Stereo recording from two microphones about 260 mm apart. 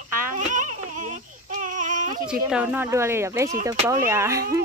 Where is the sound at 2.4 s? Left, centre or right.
Centre.